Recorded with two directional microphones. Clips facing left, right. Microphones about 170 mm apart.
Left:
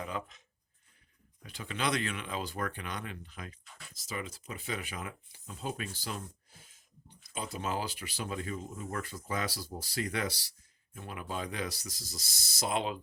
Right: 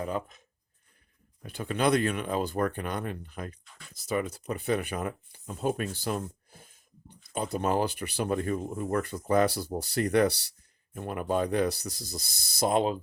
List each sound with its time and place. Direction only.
0.0 s speech: 40° right (ahead or behind)
1.4 s speech: 50° right (ahead or behind)